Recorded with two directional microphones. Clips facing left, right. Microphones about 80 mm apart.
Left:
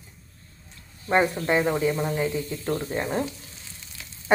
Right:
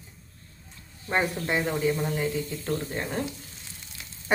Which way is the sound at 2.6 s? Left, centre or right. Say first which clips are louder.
Left 3 dB; left.